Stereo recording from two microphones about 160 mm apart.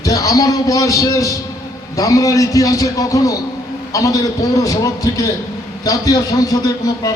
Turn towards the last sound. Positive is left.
turn(degrees=25)  # may be behind; listen again after turning